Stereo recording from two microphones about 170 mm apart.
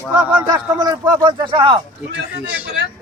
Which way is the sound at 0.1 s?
10° right (ahead or behind).